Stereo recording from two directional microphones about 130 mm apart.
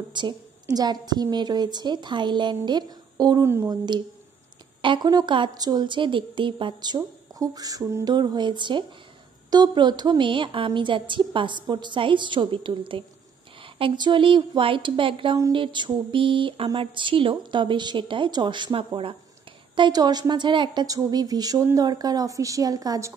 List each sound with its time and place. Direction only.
0.1 s speech: 35° right (ahead or behind)
3.4 s a woman's voice: 20° right (ahead or behind)
4.8 s a woman's voice: 35° right (ahead or behind)